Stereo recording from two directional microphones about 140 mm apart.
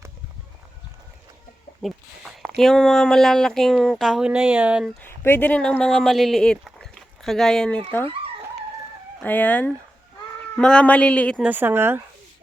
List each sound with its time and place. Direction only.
1.8 s speech: centre (ahead or behind)
5.0 s speech: 15° left (ahead or behind)
9.2 s speech: 10° left (ahead or behind)
11.4 s speech: 15° right (ahead or behind)